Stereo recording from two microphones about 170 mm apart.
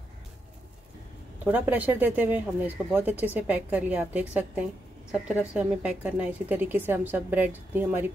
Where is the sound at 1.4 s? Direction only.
10° right (ahead or behind).